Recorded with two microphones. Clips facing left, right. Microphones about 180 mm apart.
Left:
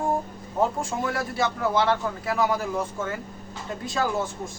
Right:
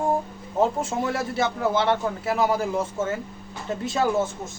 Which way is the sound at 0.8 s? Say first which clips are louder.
Right 2 dB; 25° right (ahead or behind).